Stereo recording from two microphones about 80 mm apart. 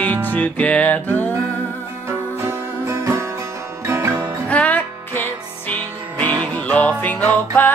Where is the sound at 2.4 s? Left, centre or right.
Right.